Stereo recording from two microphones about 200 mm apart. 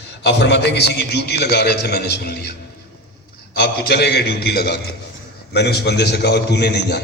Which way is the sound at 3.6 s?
55° left (ahead or behind).